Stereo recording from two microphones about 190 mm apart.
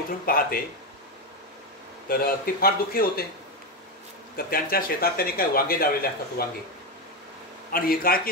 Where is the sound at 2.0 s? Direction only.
50° left (ahead or behind).